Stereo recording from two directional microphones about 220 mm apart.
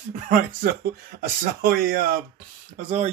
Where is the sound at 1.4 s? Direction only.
40° right (ahead or behind).